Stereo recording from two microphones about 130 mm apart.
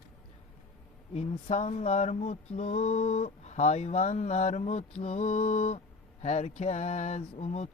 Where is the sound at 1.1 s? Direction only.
60° left (ahead or behind).